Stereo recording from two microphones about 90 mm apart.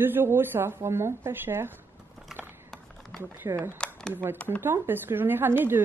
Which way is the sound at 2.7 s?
5° left (ahead or behind).